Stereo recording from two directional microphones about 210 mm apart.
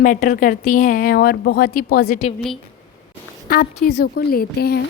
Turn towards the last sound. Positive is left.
turn(degrees=50)  # may be behind; listen again after turning